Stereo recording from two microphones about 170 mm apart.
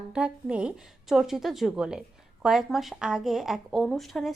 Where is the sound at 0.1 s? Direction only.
5° right (ahead or behind).